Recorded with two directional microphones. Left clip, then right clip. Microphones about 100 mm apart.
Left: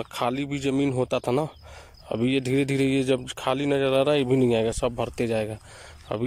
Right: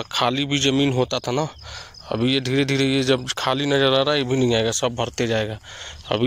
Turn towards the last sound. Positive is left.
turn(degrees=10)  # may be behind; listen again after turning